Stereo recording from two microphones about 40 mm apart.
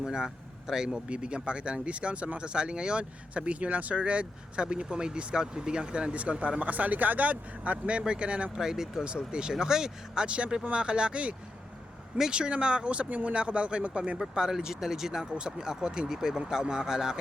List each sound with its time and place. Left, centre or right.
0.0 s speech: centre
8.5 s speech: centre
9.0 s speech: right
10.2 s speech: right
13.3 s speech: right
14.2 s speech: centre